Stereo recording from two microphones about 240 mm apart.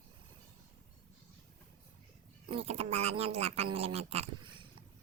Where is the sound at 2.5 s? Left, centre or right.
Right.